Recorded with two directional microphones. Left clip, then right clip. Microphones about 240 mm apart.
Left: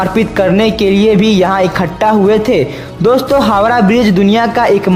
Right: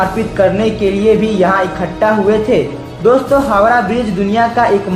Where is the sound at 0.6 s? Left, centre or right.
Left.